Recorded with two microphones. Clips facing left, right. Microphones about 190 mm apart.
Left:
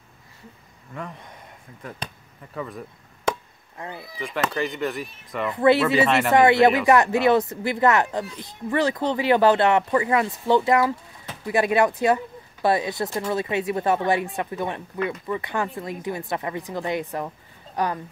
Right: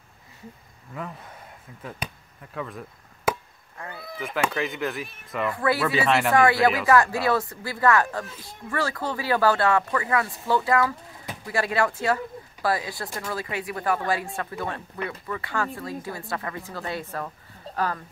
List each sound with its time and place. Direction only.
1.8 s speech: 5° right (ahead or behind)
3.3 s chop: 5° right (ahead or behind)
3.7 s speech: 20° left (ahead or behind)
4.2 s speech: centre (ahead or behind)
5.5 s speech: 25° left (ahead or behind)
5.9 s speech: centre (ahead or behind)
6.3 s speech: 20° left (ahead or behind)